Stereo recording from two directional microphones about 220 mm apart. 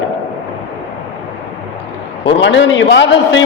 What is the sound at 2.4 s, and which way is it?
A man's voice, 55° left (ahead or behind).